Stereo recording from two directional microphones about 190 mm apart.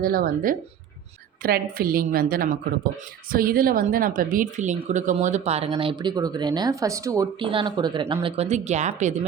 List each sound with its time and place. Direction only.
0.0 s a woman's voice: 50° right (ahead or behind)